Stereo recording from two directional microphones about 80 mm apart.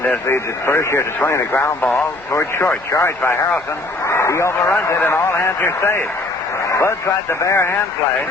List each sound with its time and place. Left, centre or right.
0.0 s a man's voice: left